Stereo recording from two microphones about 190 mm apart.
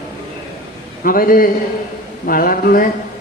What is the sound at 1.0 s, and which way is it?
A woman's voice, 50° left (ahead or behind).